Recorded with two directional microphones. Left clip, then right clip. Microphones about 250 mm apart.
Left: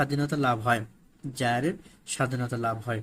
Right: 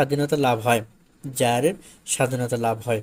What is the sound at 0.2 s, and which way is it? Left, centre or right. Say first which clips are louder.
Speech: right 6 dB; centre.